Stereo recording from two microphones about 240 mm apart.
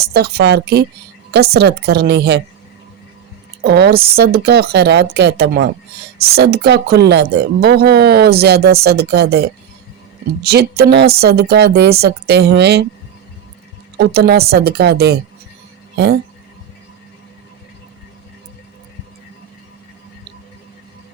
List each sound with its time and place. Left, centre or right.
0.0 s a woman's voice: right
3.6 s a woman's voice: right
14.0 s a woman's voice: right